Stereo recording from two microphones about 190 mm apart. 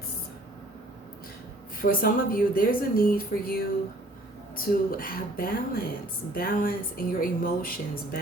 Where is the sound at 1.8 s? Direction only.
50° left (ahead or behind).